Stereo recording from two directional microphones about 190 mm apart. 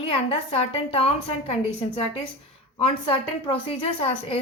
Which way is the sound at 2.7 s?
30° left (ahead or behind).